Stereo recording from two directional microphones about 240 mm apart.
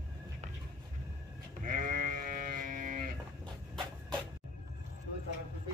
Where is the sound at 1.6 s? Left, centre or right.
Right.